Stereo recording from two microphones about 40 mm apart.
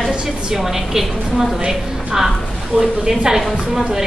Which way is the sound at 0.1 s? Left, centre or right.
Right.